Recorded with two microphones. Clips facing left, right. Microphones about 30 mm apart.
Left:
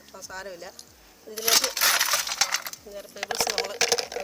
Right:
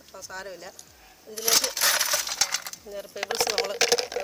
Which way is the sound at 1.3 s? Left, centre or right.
Centre.